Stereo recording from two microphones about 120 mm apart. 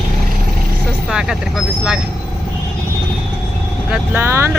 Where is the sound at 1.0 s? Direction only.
5° right (ahead or behind).